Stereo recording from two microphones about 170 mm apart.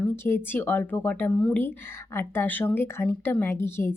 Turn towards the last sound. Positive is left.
turn(degrees=15)  # may be behind; listen again after turning